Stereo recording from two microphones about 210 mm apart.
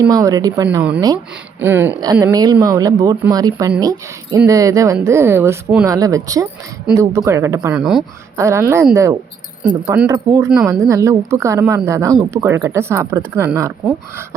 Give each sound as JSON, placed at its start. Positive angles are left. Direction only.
{"t": 0.0, "sound": "speech", "side_deg": -15}
{"t": 0.8, "sound": "speech", "side_deg": -5}
{"t": 7.7, "sound": "speech", "side_deg": -5}